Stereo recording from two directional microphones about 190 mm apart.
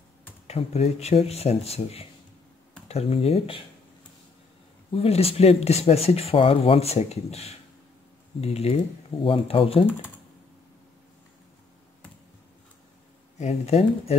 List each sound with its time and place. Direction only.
0.5 s speech: 35° left (ahead or behind)
4.9 s speech: 30° left (ahead or behind)
13.4 s speech: 35° left (ahead or behind)